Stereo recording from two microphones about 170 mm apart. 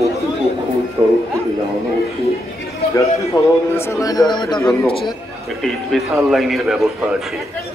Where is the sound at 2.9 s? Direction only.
15° left (ahead or behind); by 5.2 s 35° left (ahead or behind).